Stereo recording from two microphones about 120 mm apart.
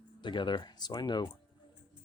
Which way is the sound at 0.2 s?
40° left (ahead or behind).